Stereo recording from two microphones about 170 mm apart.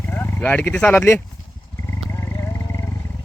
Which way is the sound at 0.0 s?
15° left (ahead or behind).